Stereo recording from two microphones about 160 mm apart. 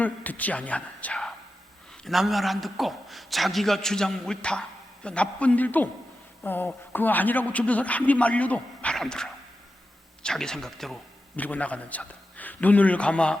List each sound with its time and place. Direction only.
0.0 s a man's voice: 10° left (ahead or behind)